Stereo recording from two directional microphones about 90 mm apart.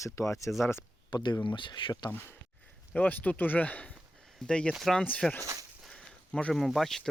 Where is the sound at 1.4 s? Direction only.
60° left (ahead or behind).